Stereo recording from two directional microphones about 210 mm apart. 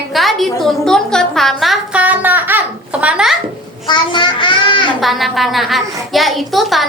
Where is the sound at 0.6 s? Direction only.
Centre (ahead or behind).